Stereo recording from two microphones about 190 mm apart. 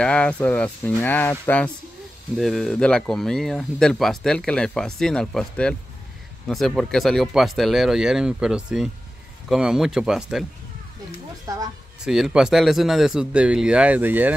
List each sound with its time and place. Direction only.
0.0 s speech: 5° left (ahead or behind)
11.4 s speech: 20° right (ahead or behind)
12.0 s speech: 5° right (ahead or behind)